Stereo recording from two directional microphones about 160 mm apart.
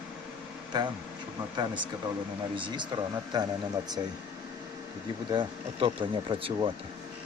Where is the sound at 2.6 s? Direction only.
30° right (ahead or behind).